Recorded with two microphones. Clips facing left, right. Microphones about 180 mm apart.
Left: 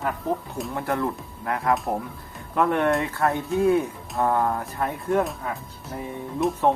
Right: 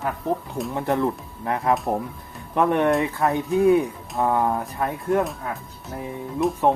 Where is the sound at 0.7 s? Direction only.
20° right (ahead or behind).